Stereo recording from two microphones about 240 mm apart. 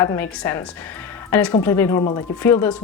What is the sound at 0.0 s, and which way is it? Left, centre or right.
Speech, centre.